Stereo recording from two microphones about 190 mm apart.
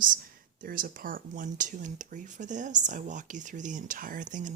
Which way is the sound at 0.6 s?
50° right (ahead or behind).